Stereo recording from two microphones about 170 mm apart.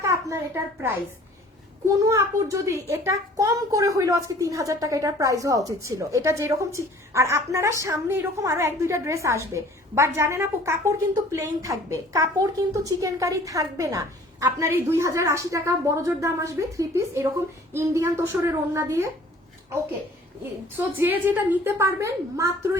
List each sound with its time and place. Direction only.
0.0 s a child's voice: 15° right (ahead or behind)
2.0 s a child's voice: 20° right (ahead or behind)
20.7 s a child's voice: 10° right (ahead or behind)